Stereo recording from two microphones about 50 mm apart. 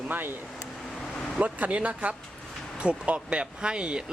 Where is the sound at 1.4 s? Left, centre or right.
Right.